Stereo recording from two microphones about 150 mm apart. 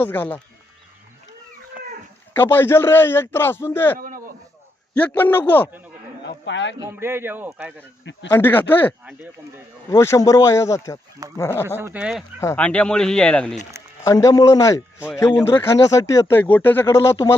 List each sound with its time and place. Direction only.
0.0 s a man's voice: 10° left (ahead or behind)
2.3 s a man's voice: 15° left (ahead or behind)
3.9 s a sound: 65° right (ahead or behind)
4.9 s a man's voice: 10° left (ahead or behind)
6.9 s speech: 15° right (ahead or behind)
8.3 s a man's voice: 15° left (ahead or behind)
11.8 s speech: 10° right (ahead or behind)
12.5 s a man's voice: 10° left (ahead or behind)
14.0 s a man's voice: 20° left (ahead or behind)